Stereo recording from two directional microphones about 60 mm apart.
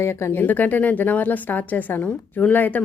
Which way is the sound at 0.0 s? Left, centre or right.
Left.